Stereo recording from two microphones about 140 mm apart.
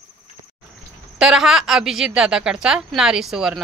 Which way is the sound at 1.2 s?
5° right (ahead or behind).